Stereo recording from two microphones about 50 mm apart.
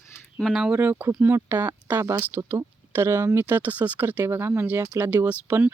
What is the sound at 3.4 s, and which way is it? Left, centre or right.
Speech, right.